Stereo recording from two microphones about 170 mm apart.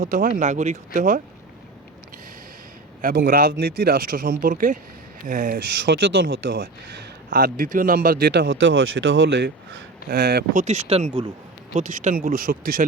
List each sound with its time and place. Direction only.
0.0 s speech: 55° right (ahead or behind)
3.0 s speech: 55° right (ahead or behind)
5.8 s speech: 70° right (ahead or behind); by 9.8 s 90° right
10.1 s speech: 65° right (ahead or behind); by 11.3 s 35° right (ahead or behind)
11.7 s speech: 45° right (ahead or behind)